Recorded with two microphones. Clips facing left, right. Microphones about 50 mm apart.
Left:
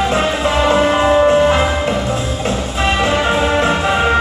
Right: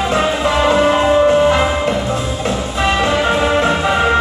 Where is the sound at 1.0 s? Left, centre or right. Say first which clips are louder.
Even; centre.